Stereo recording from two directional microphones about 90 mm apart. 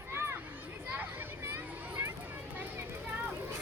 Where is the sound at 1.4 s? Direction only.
25° right (ahead or behind).